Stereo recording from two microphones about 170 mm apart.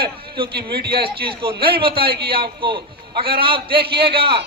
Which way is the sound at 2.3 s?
30° right (ahead or behind).